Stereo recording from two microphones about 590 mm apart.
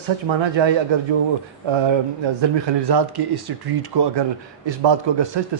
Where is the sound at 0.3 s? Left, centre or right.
Right.